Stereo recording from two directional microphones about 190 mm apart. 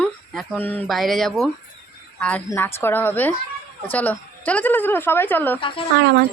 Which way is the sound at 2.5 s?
10° left (ahead or behind).